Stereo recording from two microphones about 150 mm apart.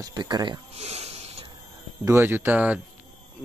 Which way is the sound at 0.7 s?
45° right (ahead or behind).